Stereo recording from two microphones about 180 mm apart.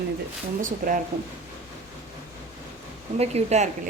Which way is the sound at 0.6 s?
50° right (ahead or behind).